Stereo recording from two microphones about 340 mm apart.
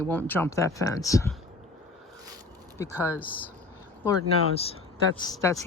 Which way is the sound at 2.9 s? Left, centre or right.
Centre.